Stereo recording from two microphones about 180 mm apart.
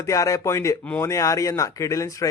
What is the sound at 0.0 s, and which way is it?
Speech, 20° left (ahead or behind).